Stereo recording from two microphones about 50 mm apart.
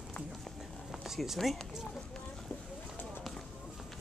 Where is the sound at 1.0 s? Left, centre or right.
Centre.